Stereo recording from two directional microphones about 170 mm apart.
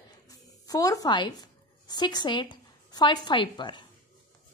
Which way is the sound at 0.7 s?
20° left (ahead or behind).